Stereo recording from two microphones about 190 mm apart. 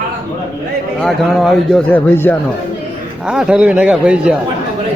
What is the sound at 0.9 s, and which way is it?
A man's voice, centre (ahead or behind).